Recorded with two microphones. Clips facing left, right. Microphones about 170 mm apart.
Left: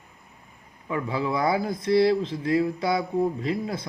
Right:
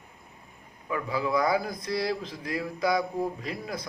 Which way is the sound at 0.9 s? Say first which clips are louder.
Left 2 dB; 25° left (ahead or behind).